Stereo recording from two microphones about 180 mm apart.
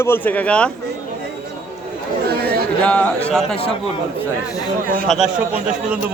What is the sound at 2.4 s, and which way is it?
Chatter, 60° right (ahead or behind).